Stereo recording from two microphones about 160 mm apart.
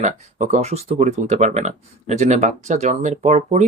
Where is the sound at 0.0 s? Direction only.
45° right (ahead or behind).